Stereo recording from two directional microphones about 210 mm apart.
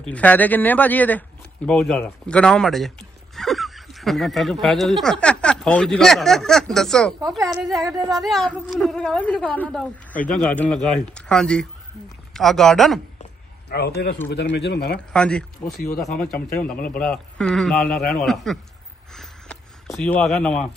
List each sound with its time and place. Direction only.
0.0 s a woman's voice: 5° left (ahead or behind)
7.2 s a woman's voice: 15° right (ahead or behind)
7.5 s a woman's voice: centre (ahead or behind)
13.7 s speech: 50° left (ahead or behind)
15.1 s a woman's voice: 5° left (ahead or behind)
19.1 s a sound: centre (ahead or behind)